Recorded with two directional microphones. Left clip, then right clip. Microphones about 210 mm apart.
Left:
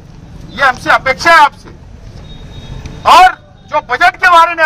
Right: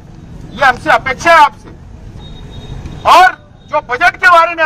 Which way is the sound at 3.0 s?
20° right (ahead or behind).